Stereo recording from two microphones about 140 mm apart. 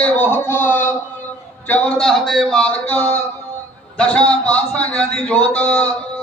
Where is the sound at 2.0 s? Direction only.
Centre (ahead or behind).